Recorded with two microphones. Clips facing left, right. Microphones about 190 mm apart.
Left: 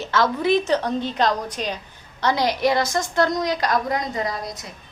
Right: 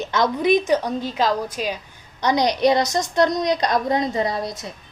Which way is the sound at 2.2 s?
15° right (ahead or behind).